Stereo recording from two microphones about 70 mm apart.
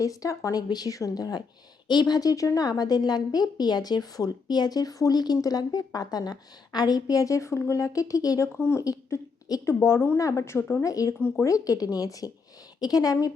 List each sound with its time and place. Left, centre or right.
0.0 s speech: left
0.7 s a woman's voice: left
0.9 s speech: left
1.9 s a woman's voice: left
8.5 s speech: left
10.2 s speech: left
10.8 s speech: left